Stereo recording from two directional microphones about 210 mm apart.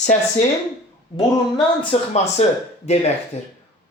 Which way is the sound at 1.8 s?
30° left (ahead or behind).